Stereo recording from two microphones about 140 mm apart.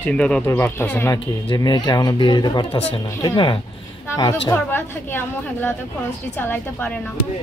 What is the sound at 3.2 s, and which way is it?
Speech, 30° left (ahead or behind).